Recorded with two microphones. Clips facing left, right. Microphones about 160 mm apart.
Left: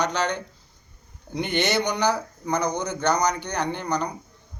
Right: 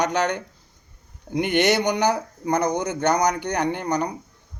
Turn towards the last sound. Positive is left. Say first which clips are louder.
# right 3 dB
turn(degrees=-50)  # may be behind; listen again after turning